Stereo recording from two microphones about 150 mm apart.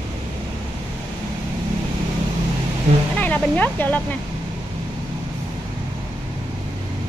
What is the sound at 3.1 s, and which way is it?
Speech, 10° left (ahead or behind).